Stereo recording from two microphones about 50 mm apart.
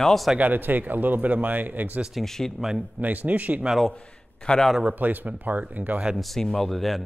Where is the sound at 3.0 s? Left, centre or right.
Right.